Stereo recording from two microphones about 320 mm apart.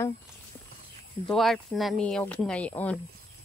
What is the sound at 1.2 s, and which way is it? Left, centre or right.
Speech, centre.